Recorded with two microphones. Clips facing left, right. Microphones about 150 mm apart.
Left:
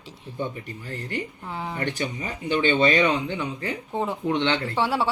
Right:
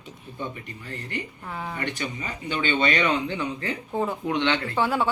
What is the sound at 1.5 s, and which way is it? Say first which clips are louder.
A man's voice: left 1 dB; 25° left (ahead or behind).